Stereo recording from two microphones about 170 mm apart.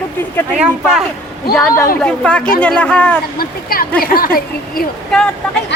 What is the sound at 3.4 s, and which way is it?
A woman's voice, 60° left (ahead or behind).